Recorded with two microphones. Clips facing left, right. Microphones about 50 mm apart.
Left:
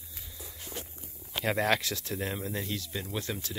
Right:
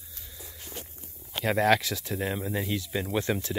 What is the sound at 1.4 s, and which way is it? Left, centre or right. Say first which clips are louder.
Speech: right 5 dB; centre.